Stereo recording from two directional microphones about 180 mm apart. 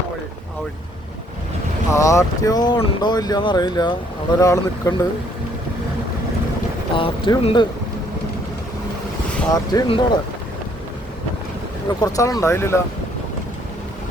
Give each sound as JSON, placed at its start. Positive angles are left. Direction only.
{"t": 1.9, "sound": "speech", "side_deg": 15}
{"t": 6.9, "sound": "speech", "side_deg": 30}
{"t": 9.5, "sound": "speech", "side_deg": 25}
{"t": 11.9, "sound": "speech", "side_deg": 20}